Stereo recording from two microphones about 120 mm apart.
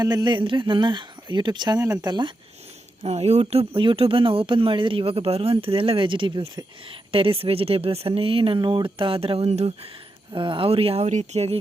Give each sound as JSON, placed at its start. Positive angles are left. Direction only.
{"t": 0.0, "sound": "speech", "side_deg": -35}
{"t": 3.0, "sound": "speech", "side_deg": -60}
{"t": 10.3, "sound": "speech", "side_deg": -45}